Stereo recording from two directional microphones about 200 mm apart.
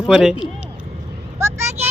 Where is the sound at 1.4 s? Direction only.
15° right (ahead or behind).